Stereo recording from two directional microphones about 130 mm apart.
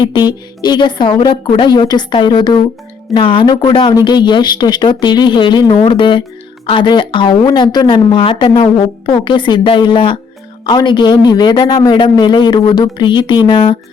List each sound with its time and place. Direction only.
0.0 s a woman's voice: 35° left (ahead or behind)